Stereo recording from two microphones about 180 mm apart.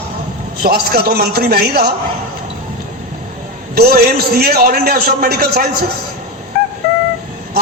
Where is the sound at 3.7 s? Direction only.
60° right (ahead or behind).